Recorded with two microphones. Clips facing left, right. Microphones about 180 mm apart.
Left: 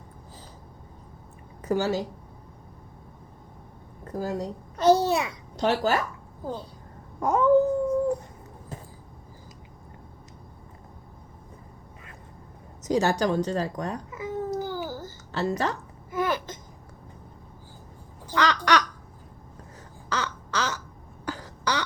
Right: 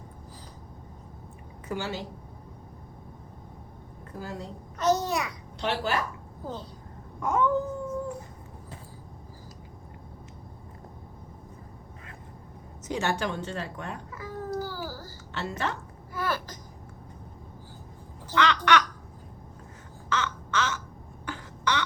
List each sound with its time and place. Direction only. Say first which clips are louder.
1.6 s a woman's voice: left 8 dB; 40° left (ahead or behind)
4.0 s a child's voice: left 8 dB; 40° left (ahead or behind)
7.2 s a woman's voice: left 6 dB; 35° left (ahead or behind)
12.8 s a woman's voice: left 6 dB; 40° left (ahead or behind)
14.1 s babbling: left 4 dB; 20° left (ahead or behind)
15.3 s a woman's voice: left 5 dB; 40° left (ahead or behind)
16.1 s speech: left 4 dB; 20° left (ahead or behind)
18.3 s speech: even; 40° left (ahead or behind)
20.1 s crow: even; 35° left (ahead or behind)
21.2 s throat clearing: left 1 dB; 35° left (ahead or behind)